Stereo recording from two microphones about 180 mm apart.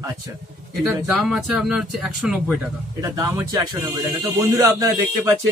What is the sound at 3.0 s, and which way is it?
Speech, 20° right (ahead or behind).